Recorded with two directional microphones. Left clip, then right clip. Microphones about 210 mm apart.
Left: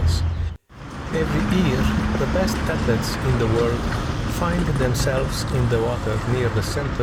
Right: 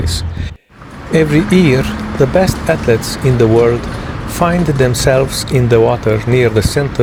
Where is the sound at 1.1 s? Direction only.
35° right (ahead or behind).